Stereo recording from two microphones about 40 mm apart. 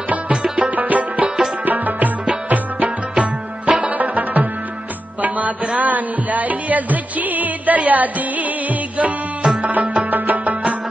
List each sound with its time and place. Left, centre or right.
0.3 s music: right
0.7 s music: right
1.2 s music: centre
1.7 s music: right